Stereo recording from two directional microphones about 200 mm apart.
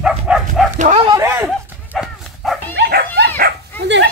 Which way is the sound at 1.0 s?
20° right (ahead or behind).